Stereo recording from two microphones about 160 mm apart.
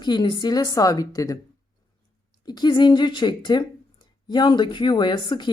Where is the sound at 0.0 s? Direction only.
30° left (ahead or behind).